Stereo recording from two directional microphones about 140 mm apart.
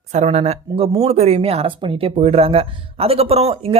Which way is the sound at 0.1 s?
55° right (ahead or behind).